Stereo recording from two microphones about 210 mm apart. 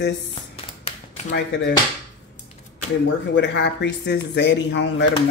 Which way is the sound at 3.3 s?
55° left (ahead or behind).